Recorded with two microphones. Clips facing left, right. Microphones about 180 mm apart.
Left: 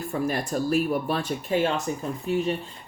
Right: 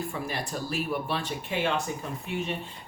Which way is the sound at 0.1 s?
45° left (ahead or behind).